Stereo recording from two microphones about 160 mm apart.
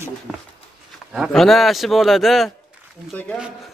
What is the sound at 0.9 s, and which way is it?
Speech, centre (ahead or behind).